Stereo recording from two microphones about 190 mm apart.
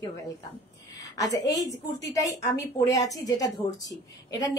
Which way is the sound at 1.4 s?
20° left (ahead or behind).